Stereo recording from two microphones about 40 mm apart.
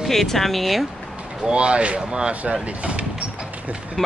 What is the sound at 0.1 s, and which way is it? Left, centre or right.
Speech, centre.